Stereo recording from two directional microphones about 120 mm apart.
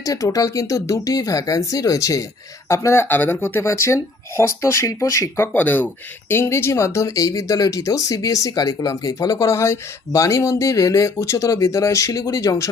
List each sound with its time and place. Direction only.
0.0 s speech: 30° left (ahead or behind)
5.5 s speech: 15° left (ahead or behind)